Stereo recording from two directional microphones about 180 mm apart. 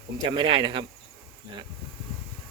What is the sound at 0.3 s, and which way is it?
Speech, 30° right (ahead or behind).